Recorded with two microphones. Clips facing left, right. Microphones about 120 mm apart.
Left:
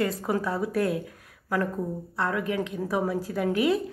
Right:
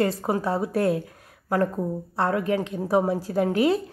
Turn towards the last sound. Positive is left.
turn(degrees=-35)  # may be behind; listen again after turning